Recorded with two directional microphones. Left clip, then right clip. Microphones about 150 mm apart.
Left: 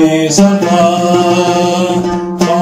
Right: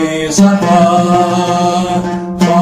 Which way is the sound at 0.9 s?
5° left (ahead or behind).